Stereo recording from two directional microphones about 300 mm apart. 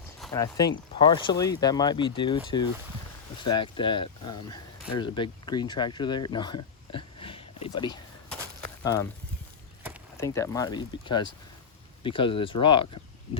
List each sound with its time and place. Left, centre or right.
0.3 s speech: centre
10.2 s speech: centre